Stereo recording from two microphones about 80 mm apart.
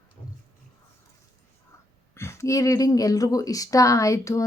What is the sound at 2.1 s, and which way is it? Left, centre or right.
Speech, left.